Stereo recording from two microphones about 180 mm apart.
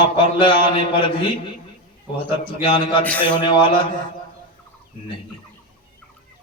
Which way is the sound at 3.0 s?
10° left (ahead or behind).